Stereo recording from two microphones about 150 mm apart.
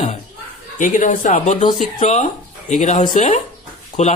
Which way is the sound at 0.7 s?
60° left (ahead or behind).